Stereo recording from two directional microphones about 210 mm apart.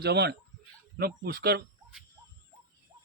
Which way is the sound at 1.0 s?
50° right (ahead or behind).